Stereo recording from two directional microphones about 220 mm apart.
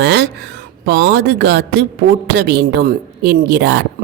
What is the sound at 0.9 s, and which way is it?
Speech, 50° right (ahead or behind).